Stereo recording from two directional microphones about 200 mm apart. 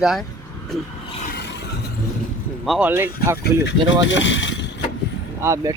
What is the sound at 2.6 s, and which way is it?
Speech, 5° right (ahead or behind).